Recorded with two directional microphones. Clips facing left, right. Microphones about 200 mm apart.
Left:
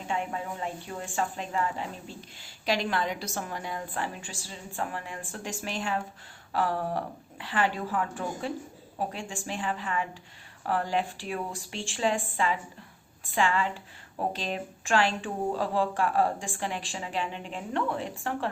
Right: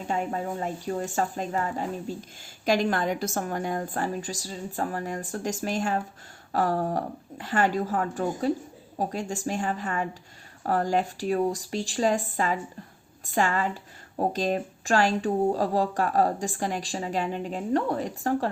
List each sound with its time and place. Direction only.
0.1 s a woman's voice: 40° right (ahead or behind)